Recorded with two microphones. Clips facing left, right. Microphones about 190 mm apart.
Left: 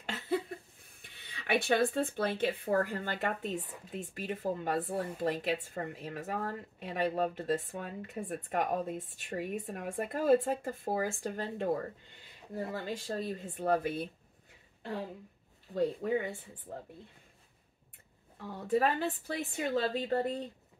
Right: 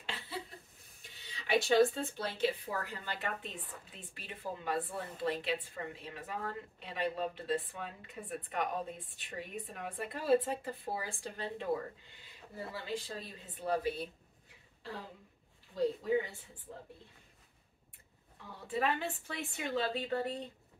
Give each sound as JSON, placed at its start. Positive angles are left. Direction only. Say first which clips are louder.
{"t": 0.0, "sound": "a sound", "louder": "left 10 dB", "side_deg": 50}
{"t": 1.0, "sound": "a woman's voice", "louder": "left 6 dB", "side_deg": 55}
{"t": 15.7, "sound": "a woman's voice", "louder": "left 1 dB", "side_deg": 55}
{"t": 18.5, "sound": "a woman's voice", "louder": "left 5 dB", "side_deg": 45}